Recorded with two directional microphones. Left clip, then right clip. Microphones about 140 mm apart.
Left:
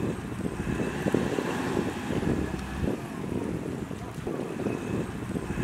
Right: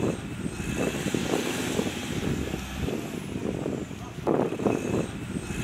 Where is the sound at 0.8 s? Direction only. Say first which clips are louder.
Even; 20° right (ahead or behind).